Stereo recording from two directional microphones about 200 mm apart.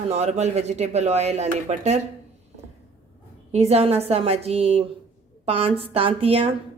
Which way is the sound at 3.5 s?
30° right (ahead or behind).